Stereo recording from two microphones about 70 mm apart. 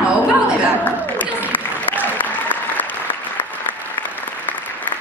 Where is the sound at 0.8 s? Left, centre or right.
Left.